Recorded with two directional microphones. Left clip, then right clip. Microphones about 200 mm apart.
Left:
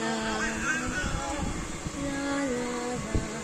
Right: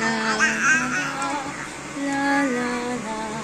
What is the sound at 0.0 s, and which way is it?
Music, 20° left (ahead or behind).